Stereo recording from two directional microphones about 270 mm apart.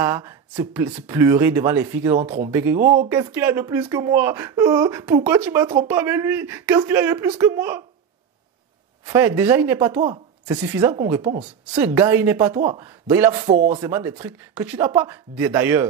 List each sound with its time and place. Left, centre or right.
0.0 s speech: centre
9.0 s speech: centre